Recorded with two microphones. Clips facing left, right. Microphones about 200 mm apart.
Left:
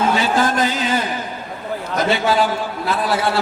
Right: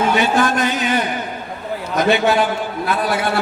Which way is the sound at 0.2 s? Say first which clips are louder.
Right 1 dB; 25° left (ahead or behind).